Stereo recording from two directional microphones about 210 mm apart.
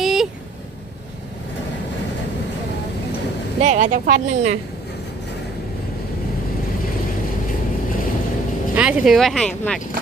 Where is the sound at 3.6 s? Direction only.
35° right (ahead or behind).